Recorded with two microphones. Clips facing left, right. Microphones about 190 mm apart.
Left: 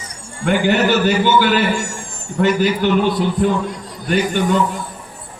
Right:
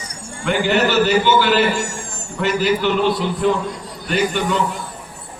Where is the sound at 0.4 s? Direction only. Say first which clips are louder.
Left 2 dB; 50° left (ahead or behind).